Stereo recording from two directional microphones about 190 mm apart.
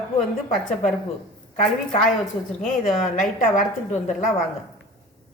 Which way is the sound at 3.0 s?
45° left (ahead or behind).